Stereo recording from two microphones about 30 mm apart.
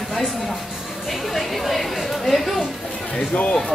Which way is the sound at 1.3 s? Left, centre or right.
Centre.